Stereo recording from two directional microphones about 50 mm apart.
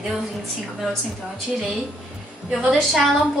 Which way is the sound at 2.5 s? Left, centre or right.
Centre.